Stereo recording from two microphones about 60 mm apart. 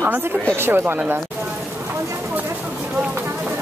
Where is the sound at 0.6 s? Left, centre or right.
Right.